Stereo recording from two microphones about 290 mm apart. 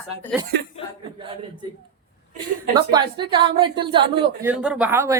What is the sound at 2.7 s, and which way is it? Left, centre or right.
A woman's voice, centre.